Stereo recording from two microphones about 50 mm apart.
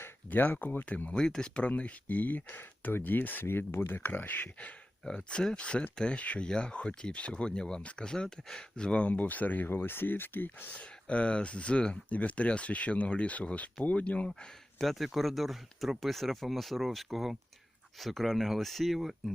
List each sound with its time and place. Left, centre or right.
0.3 s speech: left
1.1 s speech: centre
1.6 s speech: left
3.4 s speech: left
5.0 s speech: centre; by 10.7 s left
10.7 s speech: left
12.0 s speech: left
14.8 s speech: centre